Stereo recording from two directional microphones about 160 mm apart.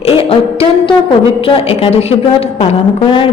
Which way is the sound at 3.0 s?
30° left (ahead or behind).